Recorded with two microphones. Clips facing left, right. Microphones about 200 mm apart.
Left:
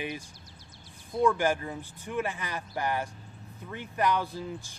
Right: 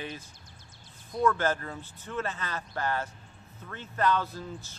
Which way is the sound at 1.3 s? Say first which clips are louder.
Even; 15° left (ahead or behind).